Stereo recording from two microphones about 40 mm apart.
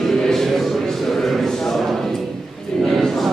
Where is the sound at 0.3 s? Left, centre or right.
Centre.